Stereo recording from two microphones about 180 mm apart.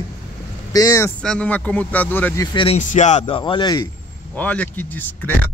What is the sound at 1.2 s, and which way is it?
Speech, 5° left (ahead or behind).